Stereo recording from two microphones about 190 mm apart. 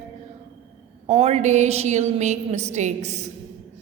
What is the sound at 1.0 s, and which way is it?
A woman's voice, 35° right (ahead or behind).